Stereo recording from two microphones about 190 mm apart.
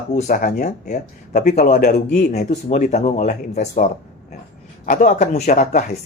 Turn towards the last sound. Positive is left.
turn(degrees=45)  # may be behind; listen again after turning